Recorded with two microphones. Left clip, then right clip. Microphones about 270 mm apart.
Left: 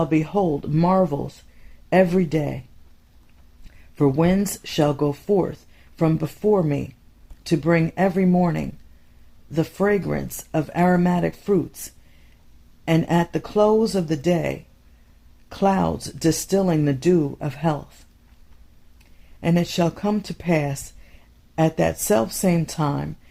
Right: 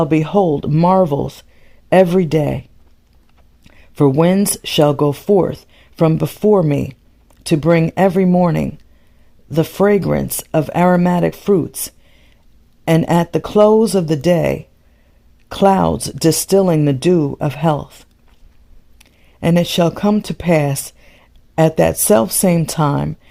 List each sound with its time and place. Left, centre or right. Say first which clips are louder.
0.0 s speech: right 7 dB; right
3.7 s speech: right 6 dB; right